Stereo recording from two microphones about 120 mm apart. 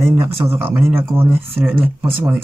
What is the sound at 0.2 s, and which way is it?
Speech, 20° right (ahead or behind).